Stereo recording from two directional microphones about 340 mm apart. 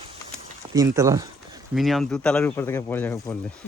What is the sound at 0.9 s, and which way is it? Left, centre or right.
Speech, centre.